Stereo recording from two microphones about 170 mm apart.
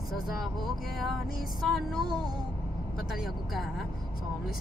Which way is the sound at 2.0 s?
25° right (ahead or behind).